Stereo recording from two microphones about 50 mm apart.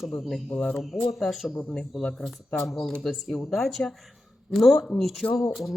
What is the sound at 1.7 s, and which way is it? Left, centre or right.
Speech, centre.